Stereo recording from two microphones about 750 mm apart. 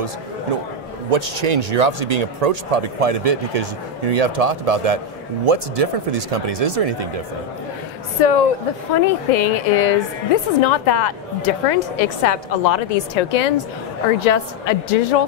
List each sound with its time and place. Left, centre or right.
1.1 s speech: right
8.2 s speech: left
8.9 s a woman's voice: left